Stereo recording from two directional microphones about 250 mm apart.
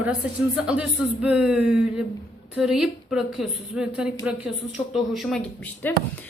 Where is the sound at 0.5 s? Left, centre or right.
Centre.